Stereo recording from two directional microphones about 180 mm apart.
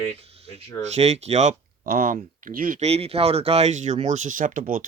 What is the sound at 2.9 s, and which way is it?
Speech, 35° right (ahead or behind).